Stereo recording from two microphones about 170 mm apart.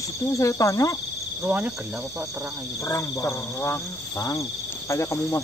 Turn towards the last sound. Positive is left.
turn(degrees=15)  # may be behind; listen again after turning